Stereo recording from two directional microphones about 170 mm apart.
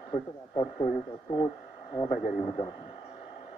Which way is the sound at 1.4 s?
20° left (ahead or behind).